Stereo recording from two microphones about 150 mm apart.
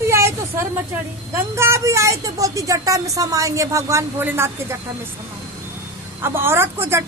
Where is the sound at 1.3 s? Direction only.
15° right (ahead or behind).